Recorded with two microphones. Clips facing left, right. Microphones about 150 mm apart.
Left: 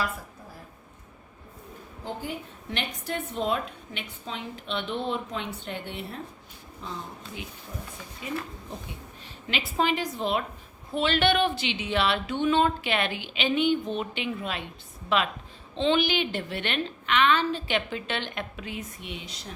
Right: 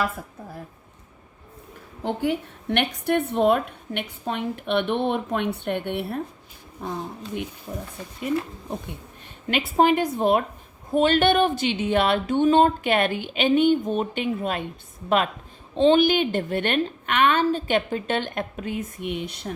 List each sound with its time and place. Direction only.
2.0 s a woman's voice: 65° right (ahead or behind)
9.5 s a woman's voice: 50° right (ahead or behind)